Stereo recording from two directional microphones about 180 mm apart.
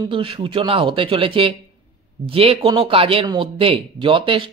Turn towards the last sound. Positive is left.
turn(degrees=-30)  # may be behind; listen again after turning